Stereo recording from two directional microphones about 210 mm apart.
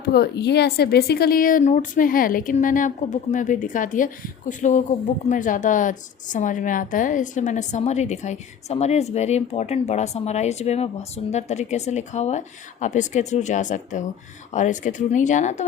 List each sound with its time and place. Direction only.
0.1 s a woman's voice: 50° left (ahead or behind); by 15.6 s 35° left (ahead or behind)